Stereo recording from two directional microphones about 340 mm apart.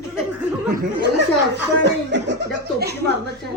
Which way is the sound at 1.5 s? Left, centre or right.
Right.